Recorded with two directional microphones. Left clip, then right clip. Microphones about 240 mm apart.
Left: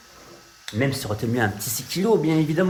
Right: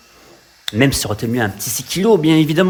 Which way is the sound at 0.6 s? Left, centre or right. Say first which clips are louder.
Right 9 dB; right.